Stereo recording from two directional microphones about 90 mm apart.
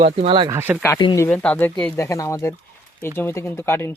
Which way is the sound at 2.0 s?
35° left (ahead or behind).